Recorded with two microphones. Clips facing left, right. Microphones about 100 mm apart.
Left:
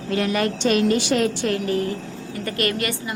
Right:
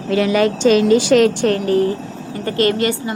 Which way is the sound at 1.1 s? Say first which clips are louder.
Right 8 dB; 75° right (ahead or behind).